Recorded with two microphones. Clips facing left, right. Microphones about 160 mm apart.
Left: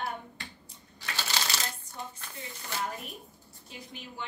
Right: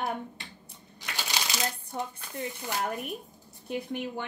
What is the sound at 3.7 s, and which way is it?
Speech, 60° right (ahead or behind).